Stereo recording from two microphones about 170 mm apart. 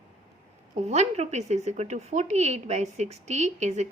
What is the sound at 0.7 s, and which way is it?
A woman's voice, 40° right (ahead or behind).